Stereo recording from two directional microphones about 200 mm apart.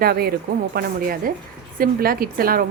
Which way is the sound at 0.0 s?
50° right (ahead or behind).